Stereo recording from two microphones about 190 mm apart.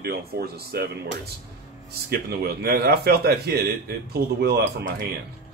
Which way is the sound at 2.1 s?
55° right (ahead or behind).